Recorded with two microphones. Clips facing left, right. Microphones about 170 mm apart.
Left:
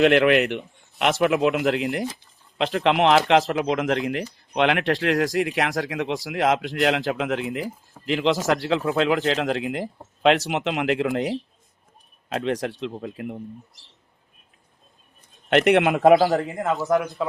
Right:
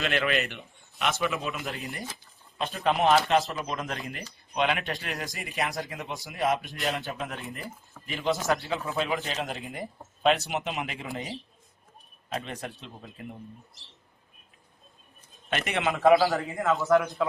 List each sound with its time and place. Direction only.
0.0 s speech: 65° left (ahead or behind)
15.4 s a man's voice: 70° left (ahead or behind); by 16.3 s 45° left (ahead or behind)